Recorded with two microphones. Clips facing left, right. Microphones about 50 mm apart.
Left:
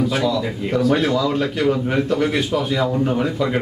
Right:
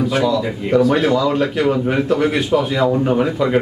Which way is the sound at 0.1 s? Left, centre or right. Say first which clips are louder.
Right 3 dB; centre.